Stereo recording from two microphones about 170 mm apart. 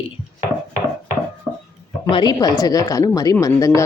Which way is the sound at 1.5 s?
Centre (ahead or behind).